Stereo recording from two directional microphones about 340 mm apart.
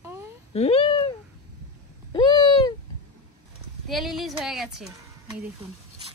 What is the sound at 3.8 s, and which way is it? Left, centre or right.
A woman's voice, centre.